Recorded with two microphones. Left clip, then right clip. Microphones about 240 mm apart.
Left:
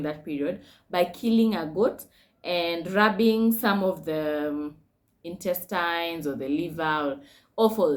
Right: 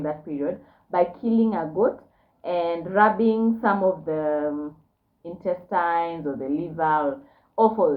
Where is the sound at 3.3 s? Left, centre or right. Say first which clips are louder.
Right 2 dB; left.